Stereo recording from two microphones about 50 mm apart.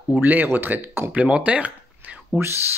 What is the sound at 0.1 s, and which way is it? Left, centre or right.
Speech, right.